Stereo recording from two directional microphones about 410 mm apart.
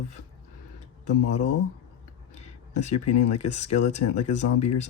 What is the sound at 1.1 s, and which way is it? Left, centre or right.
Speech, left.